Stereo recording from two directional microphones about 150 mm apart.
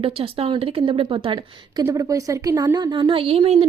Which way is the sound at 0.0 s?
40° right (ahead or behind).